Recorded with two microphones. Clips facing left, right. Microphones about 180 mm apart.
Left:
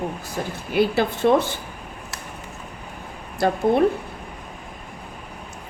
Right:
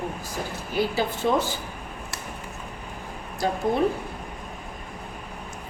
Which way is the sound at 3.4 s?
60° left (ahead or behind).